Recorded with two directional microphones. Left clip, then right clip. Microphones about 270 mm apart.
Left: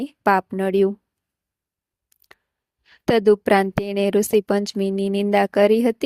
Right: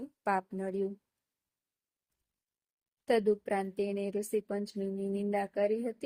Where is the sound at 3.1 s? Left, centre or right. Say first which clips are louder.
Left 13 dB; left.